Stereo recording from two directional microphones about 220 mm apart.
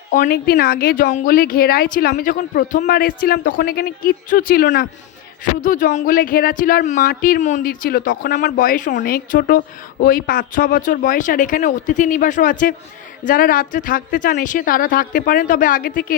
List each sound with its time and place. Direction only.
0.1 s speech: 40° left (ahead or behind)